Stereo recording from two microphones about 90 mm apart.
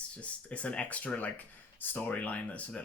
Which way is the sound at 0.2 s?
15° left (ahead or behind).